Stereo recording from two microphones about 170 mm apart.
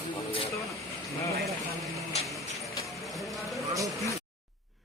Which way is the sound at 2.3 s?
Centre (ahead or behind).